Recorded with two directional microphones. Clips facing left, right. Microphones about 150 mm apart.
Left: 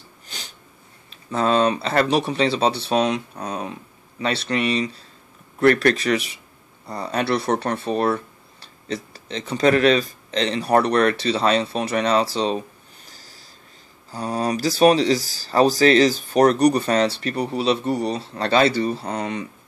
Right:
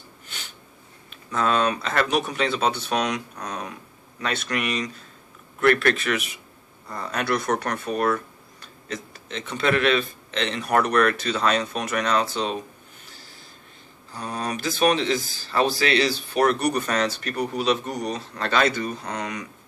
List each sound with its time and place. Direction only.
0.3 s sniff: 35° left (ahead or behind)
1.1 s speech: 30° left (ahead or behind)
13.0 s snort: 40° left (ahead or behind)
14.1 s speech: 35° left (ahead or behind)